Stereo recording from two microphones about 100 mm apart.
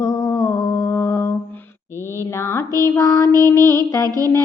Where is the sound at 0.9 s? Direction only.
30° left (ahead or behind).